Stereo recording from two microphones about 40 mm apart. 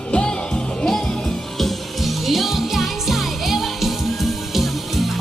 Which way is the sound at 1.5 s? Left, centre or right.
Centre.